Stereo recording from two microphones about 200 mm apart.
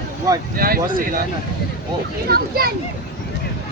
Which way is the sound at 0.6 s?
45° right (ahead or behind).